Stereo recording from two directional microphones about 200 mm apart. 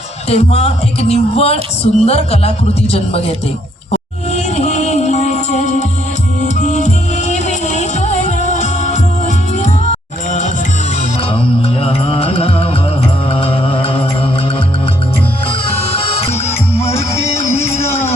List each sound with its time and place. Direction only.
0.3 s speech: 30° left (ahead or behind)
3.9 s music: 35° left (ahead or behind)
16.0 s music: 30° left (ahead or behind)
17.5 s music: 10° left (ahead or behind)